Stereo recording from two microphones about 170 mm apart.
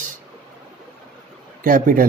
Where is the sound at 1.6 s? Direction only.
55° right (ahead or behind).